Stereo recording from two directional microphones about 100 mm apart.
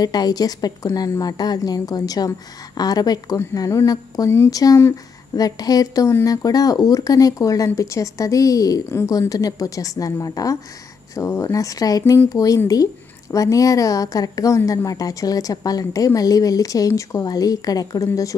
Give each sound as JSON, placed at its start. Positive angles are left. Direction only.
{"t": 0.0, "sound": "speech", "side_deg": 40}